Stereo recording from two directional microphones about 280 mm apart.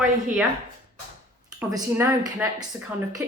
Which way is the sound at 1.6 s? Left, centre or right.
Centre.